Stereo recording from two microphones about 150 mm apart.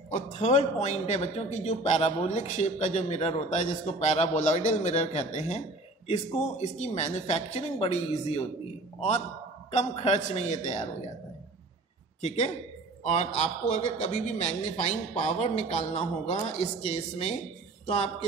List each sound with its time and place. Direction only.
0.1 s speech: 50° left (ahead or behind)
9.7 s speech: 45° left (ahead or behind)
12.2 s speech: 50° left (ahead or behind)